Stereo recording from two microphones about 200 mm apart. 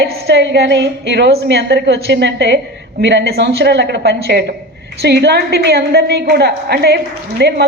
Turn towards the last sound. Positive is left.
turn(degrees=-55)  # may be behind; listen again after turning